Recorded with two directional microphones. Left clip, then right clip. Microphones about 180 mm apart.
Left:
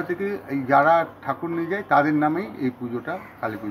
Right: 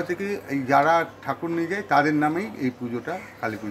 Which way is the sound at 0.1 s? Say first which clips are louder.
Left 1 dB; 15° right (ahead or behind).